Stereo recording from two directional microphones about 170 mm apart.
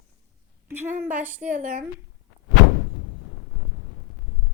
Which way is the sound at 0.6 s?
15° right (ahead or behind).